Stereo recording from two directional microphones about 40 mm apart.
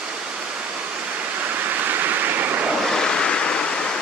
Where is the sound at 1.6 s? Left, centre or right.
Right.